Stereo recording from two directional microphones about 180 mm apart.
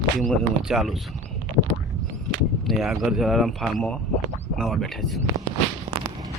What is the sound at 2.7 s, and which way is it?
Speech, centre (ahead or behind).